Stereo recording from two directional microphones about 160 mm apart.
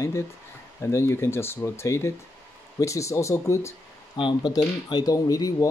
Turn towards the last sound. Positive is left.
turn(degrees=20)  # may be behind; listen again after turning